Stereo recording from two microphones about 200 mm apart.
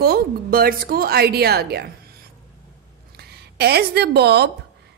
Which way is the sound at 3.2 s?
55° right (ahead or behind).